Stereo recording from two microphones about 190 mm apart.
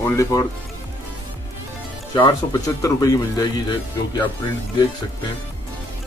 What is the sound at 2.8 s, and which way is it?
Speech, 15° left (ahead or behind).